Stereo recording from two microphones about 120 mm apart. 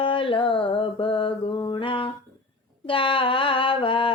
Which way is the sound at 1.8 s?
45° left (ahead or behind).